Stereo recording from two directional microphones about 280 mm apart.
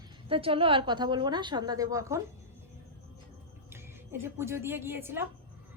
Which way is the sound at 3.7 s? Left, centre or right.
Centre.